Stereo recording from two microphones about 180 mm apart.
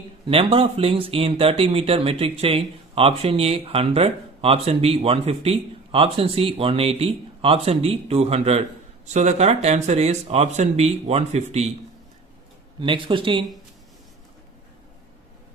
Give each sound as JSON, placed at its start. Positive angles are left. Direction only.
{"t": 0.3, "sound": "speech", "side_deg": -30}
{"t": 12.8, "sound": "speech", "side_deg": -30}